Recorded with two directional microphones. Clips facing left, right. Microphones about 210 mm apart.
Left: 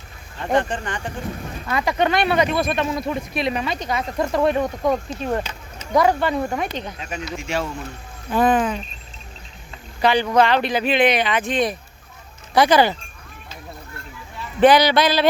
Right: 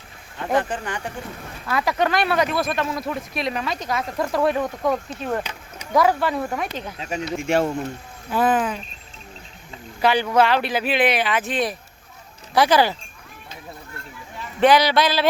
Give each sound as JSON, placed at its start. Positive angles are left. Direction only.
{"t": 0.3, "sound": "speech", "side_deg": -5}
{"t": 4.6, "sound": "speech", "side_deg": 20}
{"t": 5.4, "sound": "speech", "side_deg": -10}
{"t": 7.0, "sound": "speech", "side_deg": -30}
{"t": 7.3, "sound": "speech", "side_deg": -55}
{"t": 8.3, "sound": "speech", "side_deg": -5}
{"t": 10.0, "sound": "speech", "side_deg": -5}
{"t": 14.6, "sound": "speech", "side_deg": 0}